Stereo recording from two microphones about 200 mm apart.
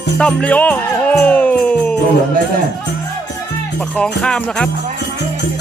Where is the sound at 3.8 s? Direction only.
5° left (ahead or behind).